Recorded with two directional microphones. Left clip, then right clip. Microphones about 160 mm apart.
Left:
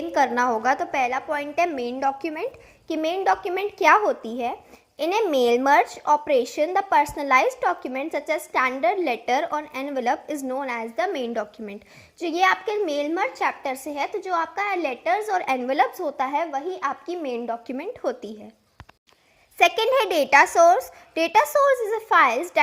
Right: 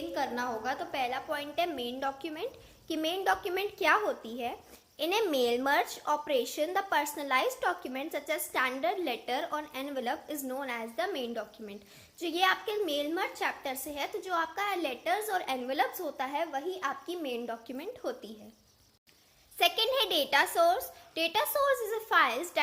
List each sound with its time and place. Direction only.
0.1 s speech: 50° left (ahead or behind)
2.0 s a woman's voice: 25° left (ahead or behind)
17.7 s speech: 45° left (ahead or behind)
19.5 s speech: 45° left (ahead or behind)
21.7 s a woman's voice: 30° left (ahead or behind)